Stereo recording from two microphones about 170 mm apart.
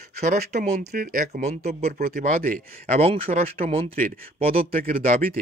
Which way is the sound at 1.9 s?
65° right (ahead or behind).